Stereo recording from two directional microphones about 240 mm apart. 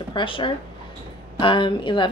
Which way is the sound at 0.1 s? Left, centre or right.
Left.